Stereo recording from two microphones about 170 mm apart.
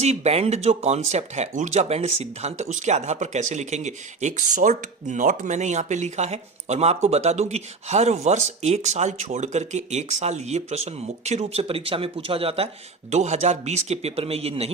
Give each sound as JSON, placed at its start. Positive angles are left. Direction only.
{"t": 0.0, "sound": "speech", "side_deg": -40}